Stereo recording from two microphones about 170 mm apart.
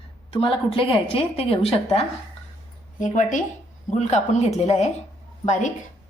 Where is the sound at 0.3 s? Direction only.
35° left (ahead or behind).